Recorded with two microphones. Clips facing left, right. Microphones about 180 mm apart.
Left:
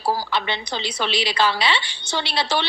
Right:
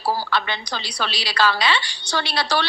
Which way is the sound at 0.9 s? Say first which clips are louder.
Left 1 dB; 20° left (ahead or behind).